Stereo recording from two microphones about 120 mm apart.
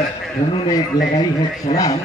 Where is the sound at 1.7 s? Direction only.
70° left (ahead or behind).